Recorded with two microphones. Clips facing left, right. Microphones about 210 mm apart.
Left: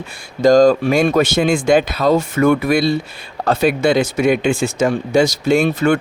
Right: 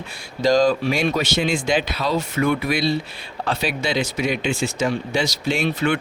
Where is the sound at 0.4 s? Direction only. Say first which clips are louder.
Left 7 dB; 45° left (ahead or behind).